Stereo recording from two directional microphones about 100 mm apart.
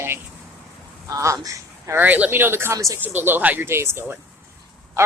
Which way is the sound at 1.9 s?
20° right (ahead or behind).